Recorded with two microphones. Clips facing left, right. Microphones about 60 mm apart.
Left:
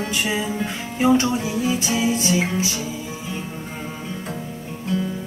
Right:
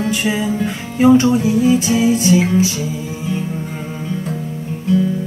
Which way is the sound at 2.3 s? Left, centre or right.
Centre.